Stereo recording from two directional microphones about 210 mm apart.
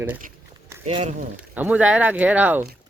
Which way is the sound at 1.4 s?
5° right (ahead or behind).